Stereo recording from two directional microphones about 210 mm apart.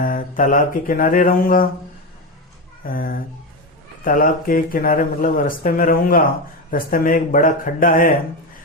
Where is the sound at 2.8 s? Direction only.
45° left (ahead or behind).